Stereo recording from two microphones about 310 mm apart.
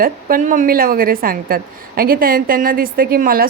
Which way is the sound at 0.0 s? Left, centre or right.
Right.